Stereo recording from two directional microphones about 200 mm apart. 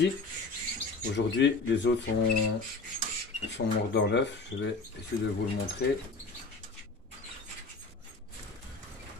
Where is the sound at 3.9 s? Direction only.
60° left (ahead or behind).